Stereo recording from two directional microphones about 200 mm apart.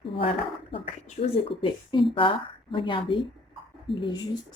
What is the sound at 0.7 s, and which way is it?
Speech, 30° left (ahead or behind).